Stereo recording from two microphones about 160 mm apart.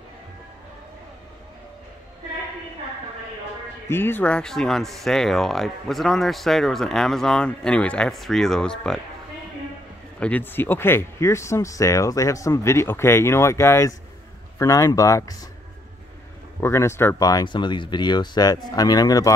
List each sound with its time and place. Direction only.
3.9 s speech: 15° left (ahead or behind)
10.2 s speech: 10° left (ahead or behind)
16.6 s speech: 15° left (ahead or behind)